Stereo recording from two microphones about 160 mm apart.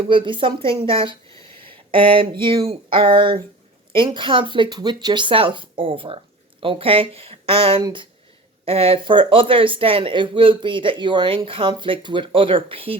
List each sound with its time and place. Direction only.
0.1 s speech: 30° right (ahead or behind)